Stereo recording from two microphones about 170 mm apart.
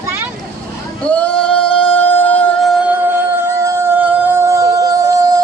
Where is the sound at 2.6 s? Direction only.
10° right (ahead or behind).